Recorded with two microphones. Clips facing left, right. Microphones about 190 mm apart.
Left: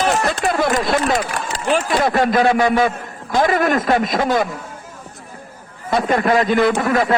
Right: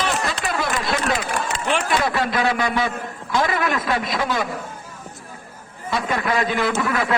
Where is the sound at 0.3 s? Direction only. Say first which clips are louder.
Left 7 dB; 45° left (ahead or behind).